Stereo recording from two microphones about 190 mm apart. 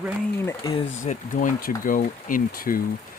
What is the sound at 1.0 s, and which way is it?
Speech, 40° left (ahead or behind).